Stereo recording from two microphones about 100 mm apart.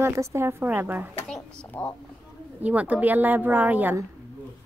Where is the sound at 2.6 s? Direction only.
15° right (ahead or behind).